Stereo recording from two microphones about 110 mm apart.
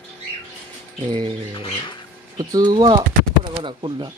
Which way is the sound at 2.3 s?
40° right (ahead or behind).